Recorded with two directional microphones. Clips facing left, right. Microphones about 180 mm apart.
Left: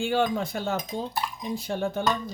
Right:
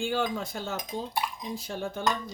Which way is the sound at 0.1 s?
65° left (ahead or behind).